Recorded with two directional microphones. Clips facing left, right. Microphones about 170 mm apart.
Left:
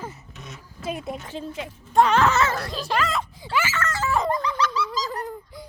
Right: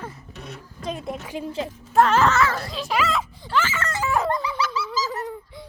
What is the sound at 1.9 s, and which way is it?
Speech, centre (ahead or behind).